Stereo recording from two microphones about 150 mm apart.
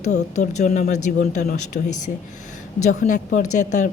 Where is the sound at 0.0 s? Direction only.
50° left (ahead or behind).